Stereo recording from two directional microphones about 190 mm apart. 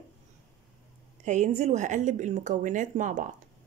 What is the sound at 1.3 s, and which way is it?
Speech, 35° right (ahead or behind).